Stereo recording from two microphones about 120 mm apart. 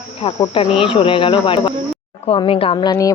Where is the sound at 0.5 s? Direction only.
50° left (ahead or behind).